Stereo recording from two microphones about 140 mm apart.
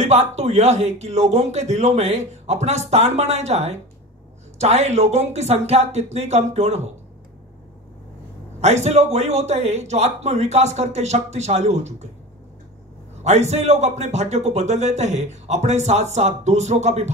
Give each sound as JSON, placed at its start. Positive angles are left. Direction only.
{"t": 0.0, "sound": "speech", "side_deg": -50}
{"t": 8.5, "sound": "speech", "side_deg": -50}
{"t": 13.2, "sound": "speech", "side_deg": -50}